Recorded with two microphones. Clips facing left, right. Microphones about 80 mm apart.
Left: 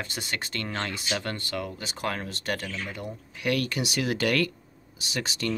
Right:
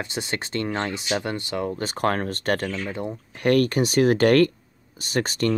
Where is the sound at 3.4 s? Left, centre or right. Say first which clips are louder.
Right 8 dB; right.